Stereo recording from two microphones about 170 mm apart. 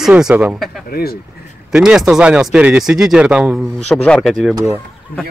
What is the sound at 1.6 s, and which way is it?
Speech, 5° right (ahead or behind).